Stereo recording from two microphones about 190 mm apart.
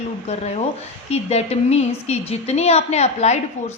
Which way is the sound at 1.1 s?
35° left (ahead or behind).